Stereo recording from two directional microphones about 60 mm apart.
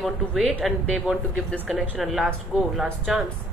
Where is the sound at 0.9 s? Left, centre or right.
Centre.